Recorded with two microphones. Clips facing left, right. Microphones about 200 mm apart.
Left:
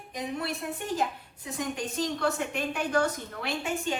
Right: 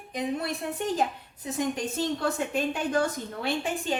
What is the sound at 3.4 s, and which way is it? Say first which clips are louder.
Speech: right 1 dB; 35° right (ahead or behind).